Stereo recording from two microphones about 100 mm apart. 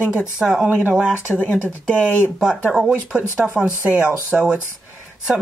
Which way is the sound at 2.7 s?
15° right (ahead or behind).